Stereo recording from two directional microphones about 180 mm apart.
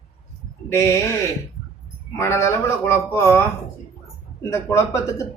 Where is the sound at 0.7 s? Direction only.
15° left (ahead or behind).